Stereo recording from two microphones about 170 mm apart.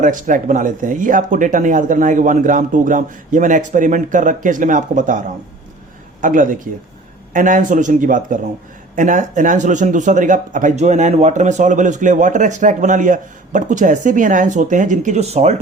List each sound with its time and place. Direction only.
0.0 s speech: 50° right (ahead or behind)
6.2 s speech: 50° right (ahead or behind)